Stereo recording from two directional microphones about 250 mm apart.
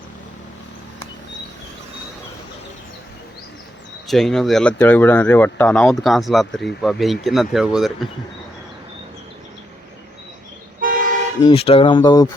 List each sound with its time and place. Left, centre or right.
4.1 s speech: centre
10.8 s toot: right
11.4 s speech: left